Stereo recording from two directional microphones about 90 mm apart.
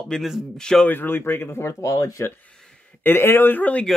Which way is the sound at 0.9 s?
25° left (ahead or behind).